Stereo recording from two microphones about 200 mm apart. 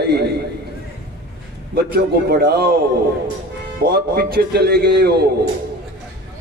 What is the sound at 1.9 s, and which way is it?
Speech, 50° right (ahead or behind).